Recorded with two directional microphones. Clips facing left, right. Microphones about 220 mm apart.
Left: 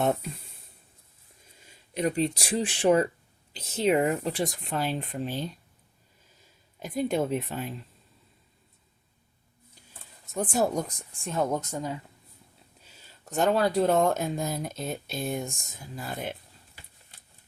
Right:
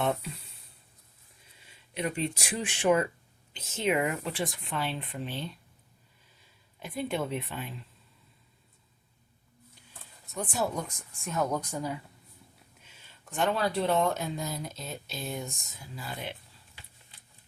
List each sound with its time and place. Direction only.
0.0 s speech: 45° left (ahead or behind)
1.6 s speech: 40° left (ahead or behind)
10.3 s speech: 50° left (ahead or behind); by 11.9 s 20° left (ahead or behind)
12.8 s speech: 40° left (ahead or behind)